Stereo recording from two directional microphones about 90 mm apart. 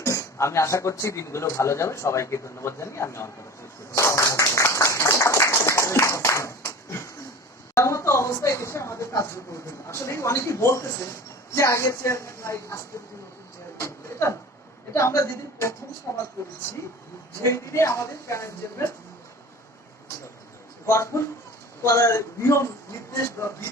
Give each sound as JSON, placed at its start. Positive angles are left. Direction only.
{"t": 0.0, "sound": "a man's voice", "side_deg": 35}
{"t": 3.9, "sound": "a sound", "side_deg": 30}
{"t": 7.8, "sound": "a woman's voice", "side_deg": 30}
{"t": 13.7, "sound": "a sound", "side_deg": 30}
{"t": 14.9, "sound": "a man's voice", "side_deg": 35}
{"t": 17.4, "sound": "a man's voice", "side_deg": 30}
{"t": 20.8, "sound": "a man's voice", "side_deg": 30}